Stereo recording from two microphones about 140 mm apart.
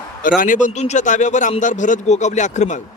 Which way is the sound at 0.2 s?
75° left (ahead or behind).